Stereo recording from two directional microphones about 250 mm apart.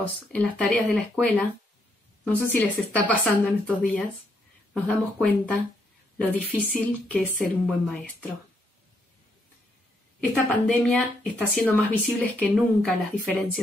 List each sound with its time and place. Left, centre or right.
0.0 s speech: centre
10.3 s speech: centre